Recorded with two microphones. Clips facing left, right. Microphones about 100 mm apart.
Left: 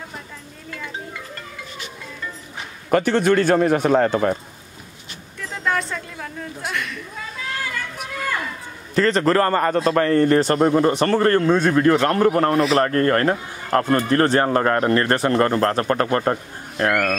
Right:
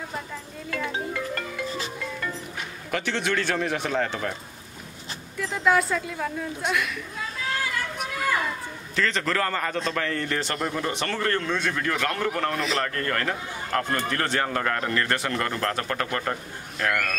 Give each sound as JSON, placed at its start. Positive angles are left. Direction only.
{"t": 2.9, "sound": "a man's voice", "side_deg": 45}
{"t": 5.5, "sound": "a woman's voice", "side_deg": -5}
{"t": 8.9, "sound": "speech", "side_deg": 40}